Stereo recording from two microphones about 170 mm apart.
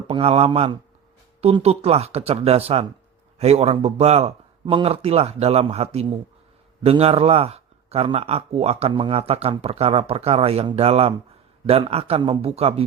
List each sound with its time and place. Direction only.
0.1 s a man's voice: 35° right (ahead or behind)